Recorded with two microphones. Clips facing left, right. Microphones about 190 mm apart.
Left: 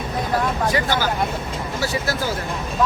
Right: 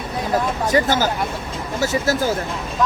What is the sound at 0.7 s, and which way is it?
Speech, 45° right (ahead or behind).